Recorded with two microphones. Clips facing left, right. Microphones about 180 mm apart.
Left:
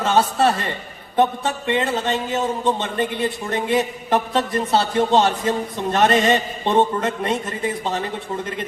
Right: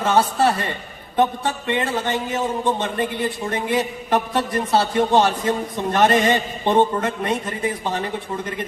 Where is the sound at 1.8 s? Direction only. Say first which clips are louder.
Left 1 dB; 25° left (ahead or behind).